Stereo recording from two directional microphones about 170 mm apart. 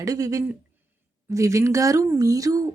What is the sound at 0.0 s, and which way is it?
A woman's voice, 20° right (ahead or behind).